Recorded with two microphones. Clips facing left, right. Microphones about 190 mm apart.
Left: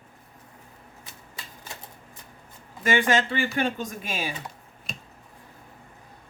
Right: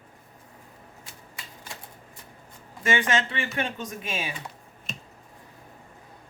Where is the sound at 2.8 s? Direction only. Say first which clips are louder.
Left 3 dB; 35° left (ahead or behind).